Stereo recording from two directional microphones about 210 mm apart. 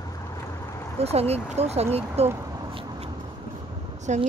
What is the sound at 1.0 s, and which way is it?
Speech, 30° right (ahead or behind).